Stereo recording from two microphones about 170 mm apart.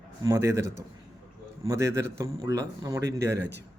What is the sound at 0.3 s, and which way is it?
A man's voice, 15° right (ahead or behind).